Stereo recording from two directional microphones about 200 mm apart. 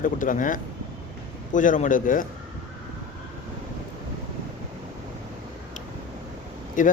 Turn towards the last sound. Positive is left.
turn(degrees=40)  # may be behind; listen again after turning